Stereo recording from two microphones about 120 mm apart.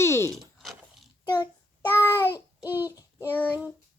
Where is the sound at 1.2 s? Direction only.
35° left (ahead or behind).